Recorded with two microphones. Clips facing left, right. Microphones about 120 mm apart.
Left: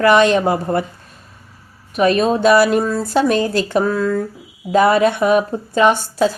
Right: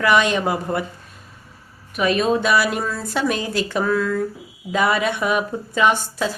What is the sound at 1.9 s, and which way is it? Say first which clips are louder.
Speech: left 4 dB; 35° left (ahead or behind).